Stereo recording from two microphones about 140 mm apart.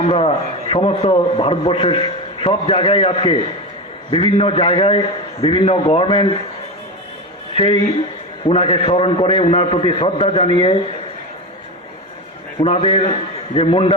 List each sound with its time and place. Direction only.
0.1 s a man's voice: 45° left (ahead or behind)
7.5 s a man's voice: 40° left (ahead or behind)
12.5 s a man's voice: 40° left (ahead or behind)